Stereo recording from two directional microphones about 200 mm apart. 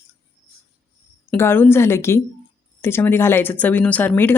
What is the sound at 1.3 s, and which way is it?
Speech, 10° left (ahead or behind).